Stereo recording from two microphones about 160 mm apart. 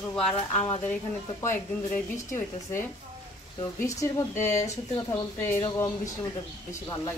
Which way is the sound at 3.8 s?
15° left (ahead or behind).